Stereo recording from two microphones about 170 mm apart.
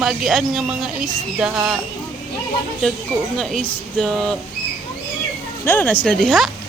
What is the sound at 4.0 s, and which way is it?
Speech, 5° left (ahead or behind).